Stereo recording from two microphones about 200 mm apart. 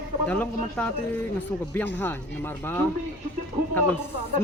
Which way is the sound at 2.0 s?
10° left (ahead or behind).